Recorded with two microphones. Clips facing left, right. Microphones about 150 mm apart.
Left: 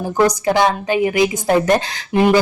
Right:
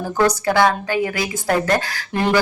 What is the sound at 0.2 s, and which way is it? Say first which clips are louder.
A woman's voice: left 1 dB; 20° left (ahead or behind).